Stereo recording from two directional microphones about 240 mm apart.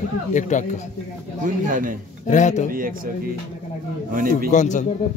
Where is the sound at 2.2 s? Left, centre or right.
Left.